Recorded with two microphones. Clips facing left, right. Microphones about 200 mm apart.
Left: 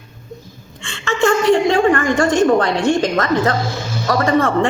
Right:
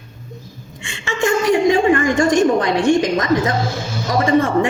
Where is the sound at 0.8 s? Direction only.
10° right (ahead or behind).